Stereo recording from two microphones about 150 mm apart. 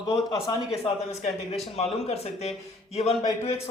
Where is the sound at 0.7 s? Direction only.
45° left (ahead or behind).